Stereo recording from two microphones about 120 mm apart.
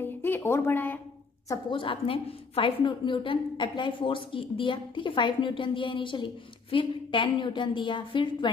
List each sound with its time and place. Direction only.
0.2 s speech: 20° left (ahead or behind)
1.7 s a woman's voice: 45° left (ahead or behind)